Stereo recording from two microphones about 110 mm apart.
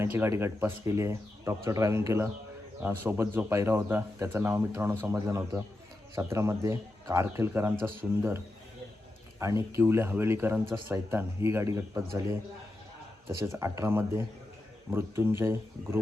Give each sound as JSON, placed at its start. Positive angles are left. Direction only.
{"t": 0.0, "sound": "speech", "side_deg": -20}
{"t": 9.4, "sound": "speech", "side_deg": -25}